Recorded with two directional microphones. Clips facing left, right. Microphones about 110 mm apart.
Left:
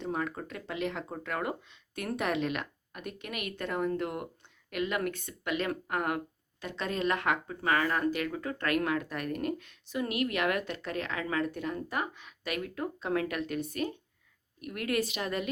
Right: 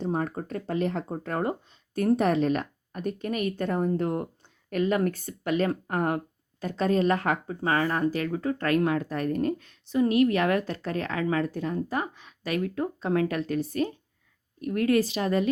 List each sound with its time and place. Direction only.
0.0 s speech: 40° right (ahead or behind)